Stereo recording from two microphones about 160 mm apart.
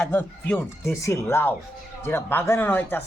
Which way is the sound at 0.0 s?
10° left (ahead or behind).